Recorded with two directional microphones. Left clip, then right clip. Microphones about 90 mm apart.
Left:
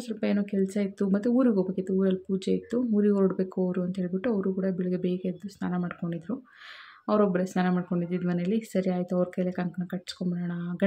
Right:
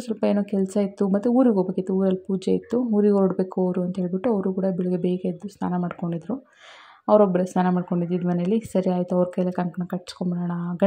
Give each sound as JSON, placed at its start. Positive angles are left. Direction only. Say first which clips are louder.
{"t": 0.2, "sound": "speech", "louder": "right 5 dB", "side_deg": -35}